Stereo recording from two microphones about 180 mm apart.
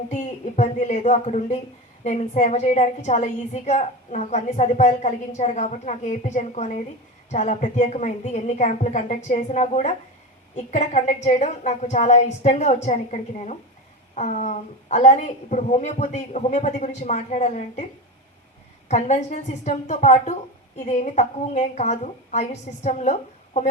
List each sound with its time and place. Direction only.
0.1 s a woman's voice: 40° left (ahead or behind)
18.9 s a woman's voice: 40° left (ahead or behind)